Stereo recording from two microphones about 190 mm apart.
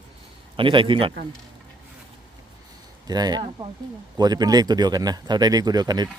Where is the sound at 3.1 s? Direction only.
20° right (ahead or behind).